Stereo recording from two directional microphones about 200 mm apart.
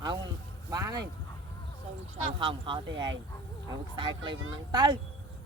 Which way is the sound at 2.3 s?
25° right (ahead or behind).